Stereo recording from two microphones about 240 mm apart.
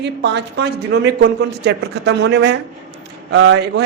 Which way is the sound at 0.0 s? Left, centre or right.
Right.